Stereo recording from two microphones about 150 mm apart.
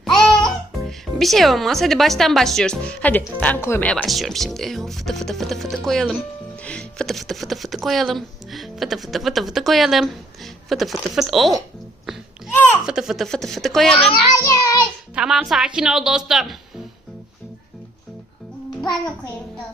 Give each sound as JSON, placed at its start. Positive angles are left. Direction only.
{"t": 0.2, "sound": "speech", "side_deg": 5}
{"t": 12.5, "sound": "speech", "side_deg": 10}
{"t": 12.8, "sound": "speech", "side_deg": -5}
{"t": 14.4, "sound": "child singing", "side_deg": 25}
{"t": 15.1, "sound": "speech", "side_deg": -5}